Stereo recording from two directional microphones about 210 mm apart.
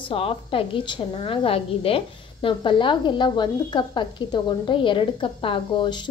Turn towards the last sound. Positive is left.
turn(degrees=25)  # may be behind; listen again after turning